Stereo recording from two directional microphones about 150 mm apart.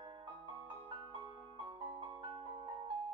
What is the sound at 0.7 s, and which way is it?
Marimba, 35° right (ahead or behind).